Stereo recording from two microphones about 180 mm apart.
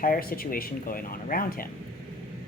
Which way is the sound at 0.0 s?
50° left (ahead or behind).